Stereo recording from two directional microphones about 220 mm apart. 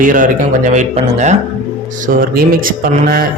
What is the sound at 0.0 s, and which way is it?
Speech, 35° right (ahead or behind).